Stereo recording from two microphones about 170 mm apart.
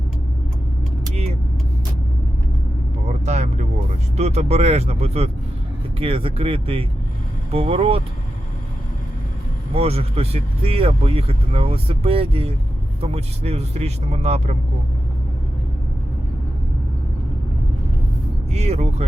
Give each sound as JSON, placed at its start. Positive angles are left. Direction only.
{"t": 1.1, "sound": "vehicle", "side_deg": -40}
{"t": 3.1, "sound": "vehicle", "side_deg": -40}
{"t": 4.2, "sound": "speech", "side_deg": -40}
{"t": 9.7, "sound": "speech", "side_deg": -35}
{"t": 18.5, "sound": "speech", "side_deg": -40}